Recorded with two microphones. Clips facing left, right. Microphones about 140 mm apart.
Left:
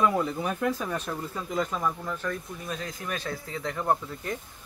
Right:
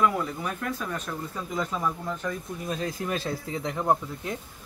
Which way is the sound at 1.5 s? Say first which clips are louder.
Left 1 dB; centre (ahead or behind).